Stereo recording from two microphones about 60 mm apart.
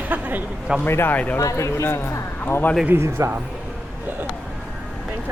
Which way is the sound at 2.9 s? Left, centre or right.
Right.